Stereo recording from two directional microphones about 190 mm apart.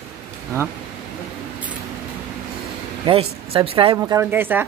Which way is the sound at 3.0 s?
30° right (ahead or behind).